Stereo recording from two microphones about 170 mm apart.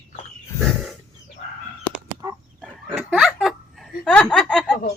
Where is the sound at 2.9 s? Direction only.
Centre (ahead or behind).